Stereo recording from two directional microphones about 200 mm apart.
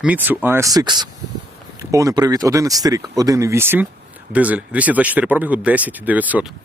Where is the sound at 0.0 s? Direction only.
10° right (ahead or behind).